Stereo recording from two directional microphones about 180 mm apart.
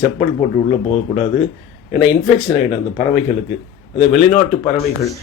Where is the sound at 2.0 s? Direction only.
30° left (ahead or behind).